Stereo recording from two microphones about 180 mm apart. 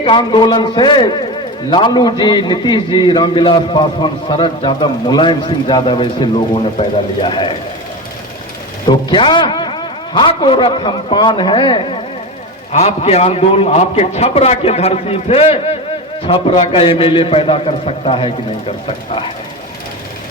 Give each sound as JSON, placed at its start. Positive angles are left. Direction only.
{"t": 0.0, "sound": "a man's voice", "side_deg": 25}
{"t": 8.9, "sound": "a man's voice", "side_deg": 25}
{"t": 12.7, "sound": "a man's voice", "side_deg": 35}